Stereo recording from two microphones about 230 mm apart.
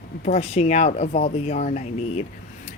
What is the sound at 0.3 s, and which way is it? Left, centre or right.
Speech, left.